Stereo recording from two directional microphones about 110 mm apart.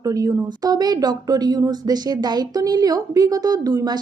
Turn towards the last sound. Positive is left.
turn(degrees=-35)  # may be behind; listen again after turning